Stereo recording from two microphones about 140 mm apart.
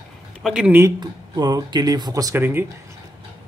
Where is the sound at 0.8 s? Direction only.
30° right (ahead or behind).